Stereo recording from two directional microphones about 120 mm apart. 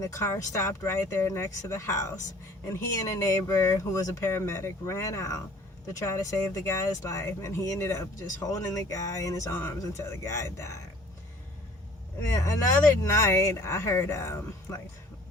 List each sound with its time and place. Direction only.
0.0 s speech: 25° left (ahead or behind)
12.3 s speech: 25° left (ahead or behind)